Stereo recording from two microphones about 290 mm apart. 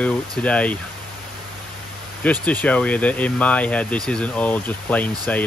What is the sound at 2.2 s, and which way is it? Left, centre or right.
Speech, centre.